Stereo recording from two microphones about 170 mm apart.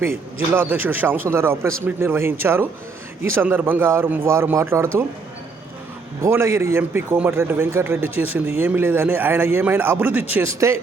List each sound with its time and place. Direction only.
0.0 s a man's voice: 15° right (ahead or behind)
6.2 s a man's voice: 15° right (ahead or behind)